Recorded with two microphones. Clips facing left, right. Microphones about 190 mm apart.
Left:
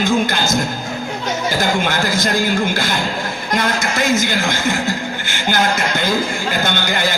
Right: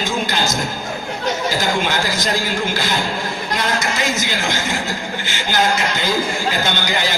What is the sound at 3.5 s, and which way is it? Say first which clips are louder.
Speech: left 3 dB; 50° left (ahead or behind).